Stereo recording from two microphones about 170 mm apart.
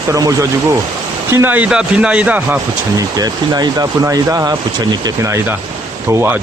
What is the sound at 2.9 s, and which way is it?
Speech, 20° right (ahead or behind).